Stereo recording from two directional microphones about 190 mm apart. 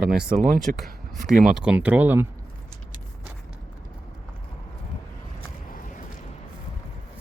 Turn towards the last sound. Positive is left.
turn(degrees=45)  # may be behind; listen again after turning